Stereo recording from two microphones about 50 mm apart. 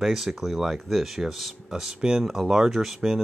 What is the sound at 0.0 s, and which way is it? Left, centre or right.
Speech, centre.